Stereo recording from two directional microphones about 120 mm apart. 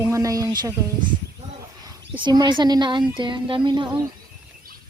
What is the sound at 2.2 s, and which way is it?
A woman's voice, 40° right (ahead or behind).